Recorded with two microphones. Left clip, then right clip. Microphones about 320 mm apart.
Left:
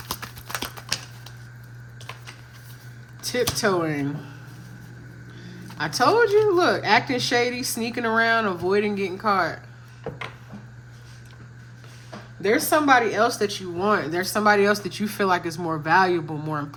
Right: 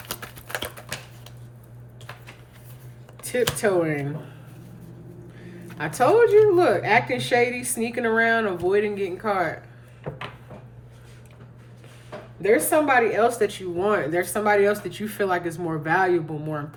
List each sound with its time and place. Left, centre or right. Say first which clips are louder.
0.9 s typewriter: left 6 dB; centre
3.2 s speech: even; centre
5.7 s speech: right 1 dB; centre
12.4 s speech: right 1 dB; centre